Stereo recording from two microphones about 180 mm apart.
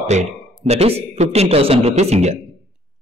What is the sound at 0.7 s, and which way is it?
Speech, 35° right (ahead or behind).